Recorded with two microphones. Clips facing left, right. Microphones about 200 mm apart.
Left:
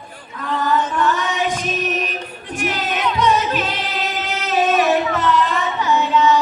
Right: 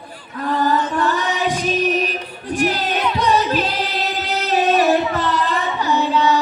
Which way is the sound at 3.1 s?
35° right (ahead or behind).